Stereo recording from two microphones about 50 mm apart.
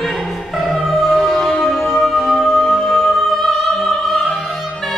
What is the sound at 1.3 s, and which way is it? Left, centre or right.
Music, centre.